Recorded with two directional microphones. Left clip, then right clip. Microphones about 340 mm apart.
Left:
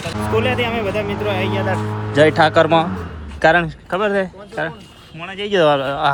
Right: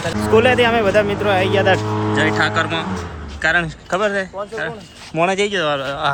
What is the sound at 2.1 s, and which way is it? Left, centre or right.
Speech, centre.